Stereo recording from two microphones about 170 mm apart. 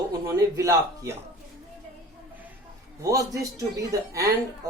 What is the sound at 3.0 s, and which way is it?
Speech, 20° right (ahead or behind).